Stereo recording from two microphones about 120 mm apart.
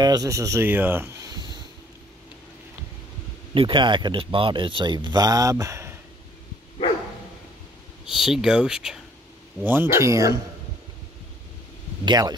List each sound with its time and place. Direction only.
0.0 s speech: 30° right (ahead or behind)
1.2 s a sound: 35° right (ahead or behind)
3.5 s speech: 45° right (ahead or behind); by 5.9 s 25° right (ahead or behind)
8.0 s speech: 5° right (ahead or behind)
9.7 s speech: 20° right (ahead or behind)
12.0 s speech: 35° right (ahead or behind)